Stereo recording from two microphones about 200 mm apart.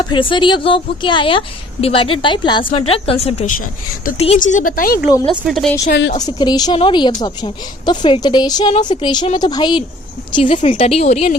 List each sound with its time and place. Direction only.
0.1 s a woman's voice: 25° left (ahead or behind); by 5.0 s 45° left (ahead or behind)
5.5 s a woman's voice: centre (ahead or behind)
5.9 s a woman's voice: 60° left (ahead or behind)
6.1 s a woman's voice: 20° left (ahead or behind)